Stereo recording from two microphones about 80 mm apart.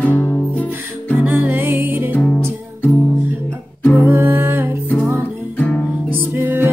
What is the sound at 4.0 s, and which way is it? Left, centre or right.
Music, right.